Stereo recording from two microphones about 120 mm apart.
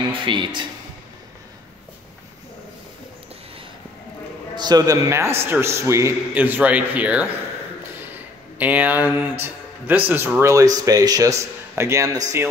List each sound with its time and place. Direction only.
0.2 s speech: 40° right (ahead or behind)
4.6 s a man's voice: 35° right (ahead or behind)